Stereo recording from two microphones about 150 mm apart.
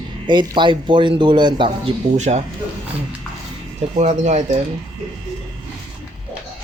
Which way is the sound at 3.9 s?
50° right (ahead or behind).